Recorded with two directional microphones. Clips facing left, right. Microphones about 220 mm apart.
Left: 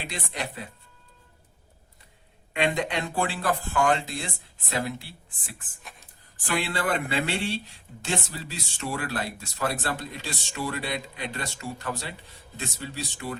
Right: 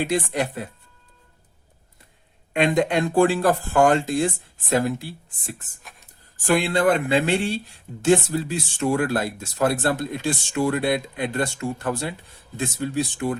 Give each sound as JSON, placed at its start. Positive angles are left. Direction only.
{"t": 0.0, "sound": "speech", "side_deg": -45}
{"t": 2.6, "sound": "speech", "side_deg": -45}